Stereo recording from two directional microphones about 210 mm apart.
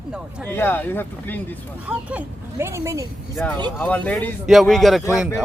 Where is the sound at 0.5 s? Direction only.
10° left (ahead or behind).